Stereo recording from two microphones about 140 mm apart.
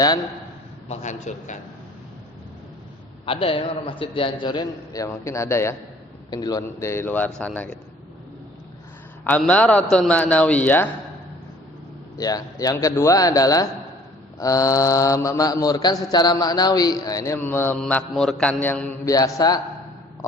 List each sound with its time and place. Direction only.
0.9 s a man's voice: 55° left (ahead or behind)
3.2 s a man's voice: 40° left (ahead or behind); by 7.8 s 10° left (ahead or behind)
9.4 s a man's voice: 10° left (ahead or behind)
12.1 s mantra: 25° left (ahead or behind)
19.0 s mantra: 25° left (ahead or behind)